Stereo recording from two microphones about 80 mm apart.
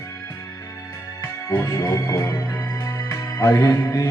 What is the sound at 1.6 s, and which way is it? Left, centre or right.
Music, left.